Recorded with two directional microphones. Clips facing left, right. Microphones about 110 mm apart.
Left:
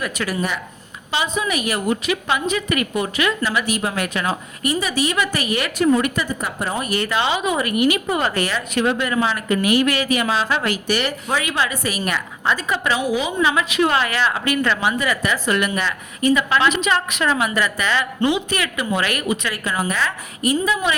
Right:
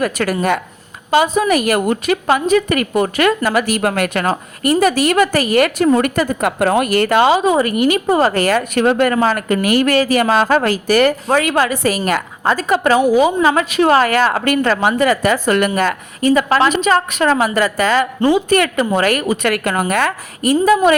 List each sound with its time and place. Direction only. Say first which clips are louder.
0.0 s a woman's voice: right 7 dB; 45° right (ahead or behind)
6.4 s speech: right 10 dB; 85° right
7.0 s a woman's voice: right 8 dB; 50° right (ahead or behind)
19.5 s a woman's voice: right 7 dB; 60° right (ahead or behind); by 20.9 s 45° right (ahead or behind)